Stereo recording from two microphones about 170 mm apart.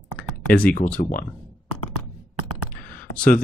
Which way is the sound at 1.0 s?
50° left (ahead or behind).